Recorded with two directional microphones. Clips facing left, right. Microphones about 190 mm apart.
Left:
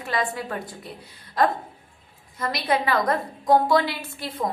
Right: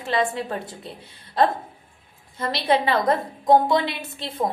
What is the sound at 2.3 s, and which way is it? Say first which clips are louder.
A woman's voice: right 3 dB; 30° right (ahead or behind).